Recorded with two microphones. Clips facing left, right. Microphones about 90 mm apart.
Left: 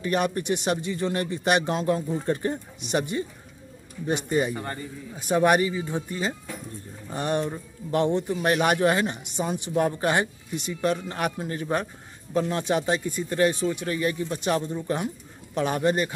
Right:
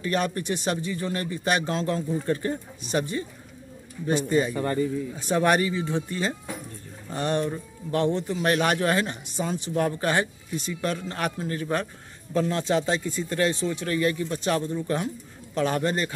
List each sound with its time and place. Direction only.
0.0 s speech: 20° left (ahead or behind)
4.3 s speech: 20° left (ahead or behind)